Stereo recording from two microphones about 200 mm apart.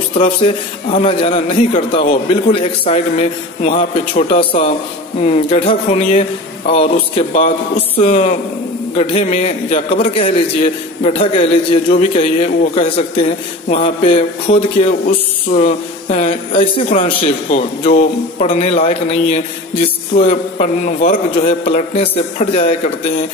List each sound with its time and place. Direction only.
0.1 s a man's voice: 30° left (ahead or behind)